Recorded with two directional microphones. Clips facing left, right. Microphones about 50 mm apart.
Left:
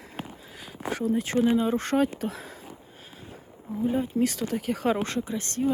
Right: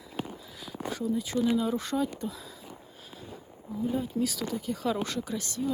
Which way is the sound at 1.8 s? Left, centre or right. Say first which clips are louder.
Left 6 dB; left.